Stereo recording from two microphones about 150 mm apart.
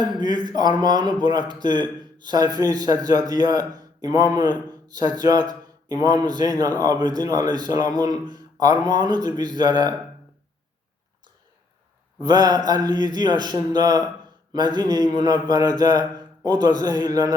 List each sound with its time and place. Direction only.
0.2 s speech: 30° right (ahead or behind)
12.2 s speech: 25° right (ahead or behind)
16.1 s a sound: 25° right (ahead or behind)
16.8 s speech: 25° right (ahead or behind)